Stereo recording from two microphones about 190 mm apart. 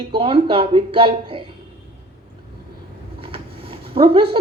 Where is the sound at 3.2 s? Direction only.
30° right (ahead or behind).